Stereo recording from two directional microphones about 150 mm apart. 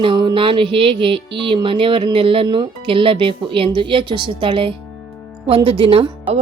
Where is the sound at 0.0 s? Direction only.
30° right (ahead or behind).